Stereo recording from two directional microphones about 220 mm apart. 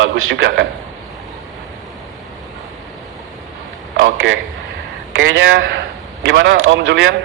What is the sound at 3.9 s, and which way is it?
A man's voice, 50° right (ahead or behind).